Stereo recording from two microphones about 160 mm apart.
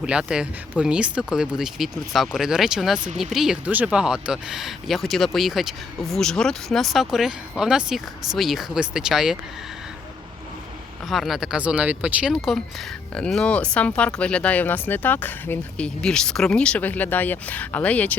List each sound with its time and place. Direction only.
0.0 s speech: 5° right (ahead or behind)
11.1 s speech: centre (ahead or behind)